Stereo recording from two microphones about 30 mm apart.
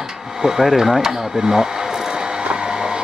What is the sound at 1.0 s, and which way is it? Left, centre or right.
Speech, centre.